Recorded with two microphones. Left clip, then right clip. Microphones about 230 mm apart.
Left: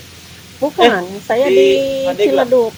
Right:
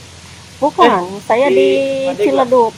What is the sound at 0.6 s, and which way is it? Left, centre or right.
Speech, left.